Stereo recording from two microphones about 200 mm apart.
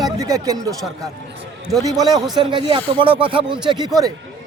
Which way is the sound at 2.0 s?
20° right (ahead or behind).